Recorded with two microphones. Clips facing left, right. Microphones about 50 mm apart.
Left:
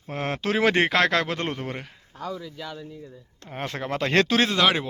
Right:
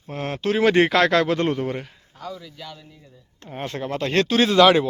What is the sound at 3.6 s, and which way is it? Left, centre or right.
Speech, left.